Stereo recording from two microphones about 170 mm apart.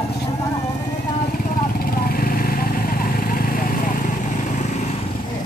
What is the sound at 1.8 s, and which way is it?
Vehicle, 60° left (ahead or behind).